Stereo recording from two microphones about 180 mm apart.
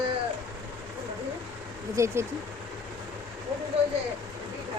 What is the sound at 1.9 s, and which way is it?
Speech, 15° right (ahead or behind).